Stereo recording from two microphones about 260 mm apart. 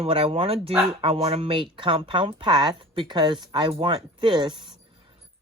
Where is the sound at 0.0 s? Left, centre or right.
Right.